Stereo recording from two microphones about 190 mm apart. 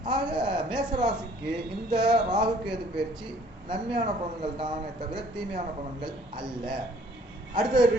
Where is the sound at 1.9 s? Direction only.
25° right (ahead or behind).